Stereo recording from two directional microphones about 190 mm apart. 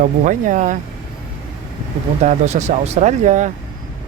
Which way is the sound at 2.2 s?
35° right (ahead or behind).